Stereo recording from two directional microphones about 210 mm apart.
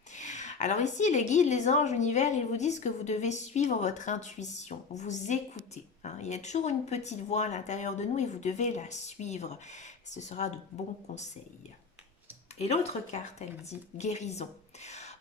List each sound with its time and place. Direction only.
0.1 s a woman's voice: 35° left (ahead or behind)
12.5 s a woman's voice: 30° left (ahead or behind)